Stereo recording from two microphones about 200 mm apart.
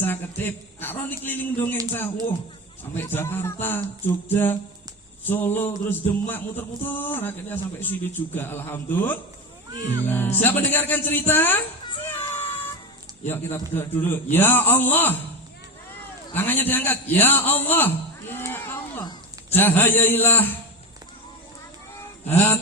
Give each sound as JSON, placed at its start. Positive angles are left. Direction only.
{"t": 0.0, "sound": "a man's voice", "side_deg": 10}
{"t": 11.9, "sound": "baby cry", "side_deg": 25}
{"t": 13.2, "sound": "a man's voice", "side_deg": 10}
{"t": 16.3, "sound": "a man's voice", "side_deg": 10}
{"t": 22.3, "sound": "a man's voice", "side_deg": 10}